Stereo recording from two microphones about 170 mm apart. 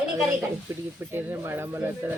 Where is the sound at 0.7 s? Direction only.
15° right (ahead or behind).